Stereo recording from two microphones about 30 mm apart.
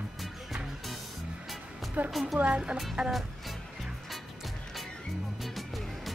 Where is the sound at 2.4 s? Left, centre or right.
Right.